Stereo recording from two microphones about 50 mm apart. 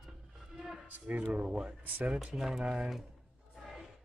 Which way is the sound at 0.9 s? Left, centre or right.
Right.